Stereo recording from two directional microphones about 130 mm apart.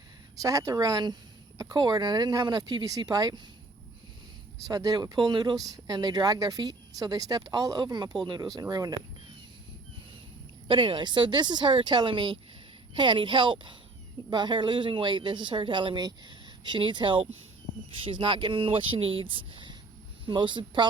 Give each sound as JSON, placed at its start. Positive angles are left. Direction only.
{"t": 0.4, "sound": "speech", "side_deg": -25}
{"t": 4.6, "sound": "speech", "side_deg": -25}
{"t": 10.7, "sound": "speech", "side_deg": -40}